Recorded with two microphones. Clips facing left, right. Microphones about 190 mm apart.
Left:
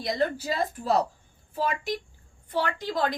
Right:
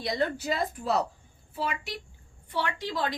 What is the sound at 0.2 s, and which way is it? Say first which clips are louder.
A woman's voice: left 2 dB; 35° left (ahead or behind).